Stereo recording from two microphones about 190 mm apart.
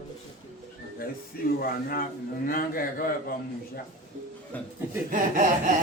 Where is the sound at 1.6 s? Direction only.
50° left (ahead or behind).